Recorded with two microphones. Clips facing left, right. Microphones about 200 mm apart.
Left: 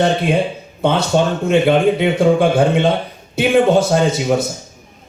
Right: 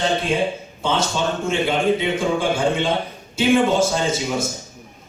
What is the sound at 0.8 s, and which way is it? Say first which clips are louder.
A man's voice: left 7 dB; 60° left (ahead or behind).